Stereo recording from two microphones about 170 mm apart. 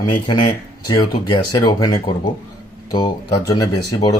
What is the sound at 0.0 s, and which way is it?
Speech, 25° left (ahead or behind).